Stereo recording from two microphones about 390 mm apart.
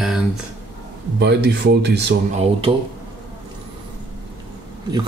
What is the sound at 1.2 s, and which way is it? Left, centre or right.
Speech, right.